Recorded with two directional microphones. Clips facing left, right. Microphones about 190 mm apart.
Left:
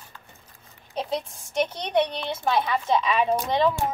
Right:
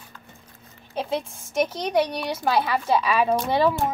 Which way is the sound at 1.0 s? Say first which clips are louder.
Right 2 dB; 5° right (ahead or behind).